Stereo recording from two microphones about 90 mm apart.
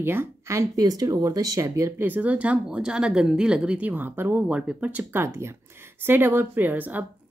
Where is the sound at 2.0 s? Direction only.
20° right (ahead or behind).